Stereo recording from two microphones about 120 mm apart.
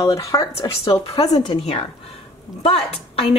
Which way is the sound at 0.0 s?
25° left (ahead or behind).